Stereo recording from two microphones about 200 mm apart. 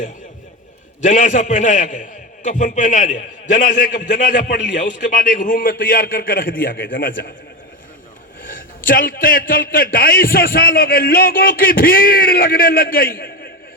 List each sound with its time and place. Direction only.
1.0 s a man's voice: 40° left (ahead or behind)
8.4 s a man's voice: 45° left (ahead or behind)